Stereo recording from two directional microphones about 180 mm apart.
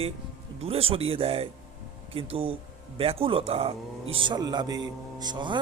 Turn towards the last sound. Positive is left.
turn(degrees=-25)  # may be behind; listen again after turning